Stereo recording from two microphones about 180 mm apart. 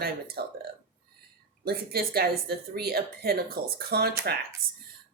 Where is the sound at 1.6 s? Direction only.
60° right (ahead or behind).